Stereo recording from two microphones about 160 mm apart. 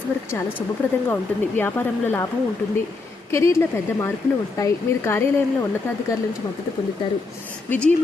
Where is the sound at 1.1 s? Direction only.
15° left (ahead or behind).